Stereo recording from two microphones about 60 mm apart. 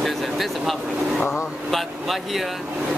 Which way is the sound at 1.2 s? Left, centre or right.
Centre.